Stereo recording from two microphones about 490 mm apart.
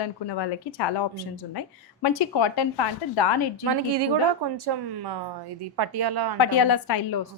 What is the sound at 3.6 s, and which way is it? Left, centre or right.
A woman's voice, right.